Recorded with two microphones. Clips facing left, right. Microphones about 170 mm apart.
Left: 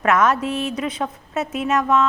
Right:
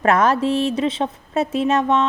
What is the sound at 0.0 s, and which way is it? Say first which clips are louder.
Speech: right 2 dB; 30° right (ahead or behind).